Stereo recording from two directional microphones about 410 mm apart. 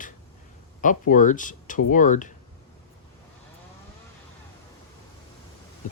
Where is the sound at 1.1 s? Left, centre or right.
Centre.